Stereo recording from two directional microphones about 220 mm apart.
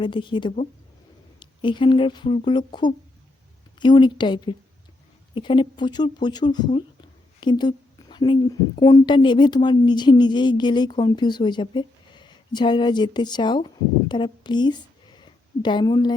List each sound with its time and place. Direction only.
0.0 s speech: 20° left (ahead or behind)